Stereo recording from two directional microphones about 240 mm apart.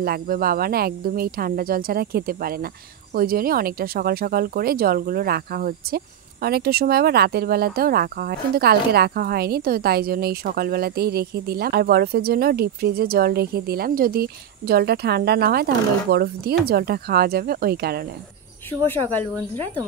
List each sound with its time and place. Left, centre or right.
0.0 s speech: right
18.7 s speech: centre